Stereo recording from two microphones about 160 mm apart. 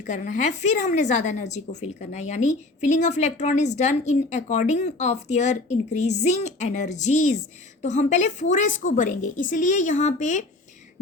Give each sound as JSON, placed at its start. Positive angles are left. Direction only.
{"t": 0.0, "sound": "a woman's voice", "side_deg": 50}